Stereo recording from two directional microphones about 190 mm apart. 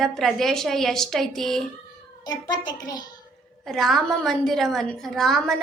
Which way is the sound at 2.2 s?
20° left (ahead or behind).